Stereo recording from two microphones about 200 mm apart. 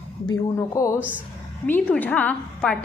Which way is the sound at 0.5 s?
15° left (ahead or behind).